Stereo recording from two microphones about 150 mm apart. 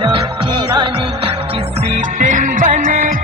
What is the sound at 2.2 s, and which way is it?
Music, 60° right (ahead or behind).